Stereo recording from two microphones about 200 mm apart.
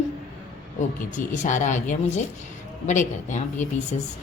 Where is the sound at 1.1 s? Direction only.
40° left (ahead or behind).